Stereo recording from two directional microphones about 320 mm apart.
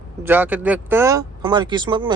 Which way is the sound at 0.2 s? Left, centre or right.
Centre.